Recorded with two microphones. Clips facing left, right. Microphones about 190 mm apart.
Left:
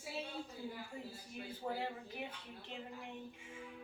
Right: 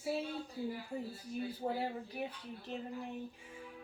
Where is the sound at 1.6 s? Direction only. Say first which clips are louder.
Right 3 dB; 35° right (ahead or behind).